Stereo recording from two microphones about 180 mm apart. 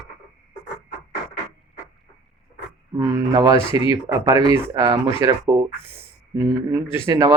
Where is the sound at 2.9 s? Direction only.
20° right (ahead or behind).